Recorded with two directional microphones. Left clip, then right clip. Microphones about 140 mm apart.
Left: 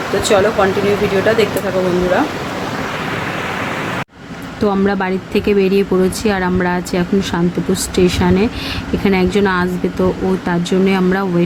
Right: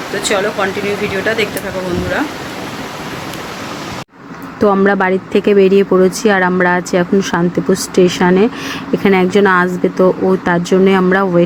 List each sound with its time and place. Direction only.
0.3 s speech: centre (ahead or behind)
4.6 s speech: 10° right (ahead or behind)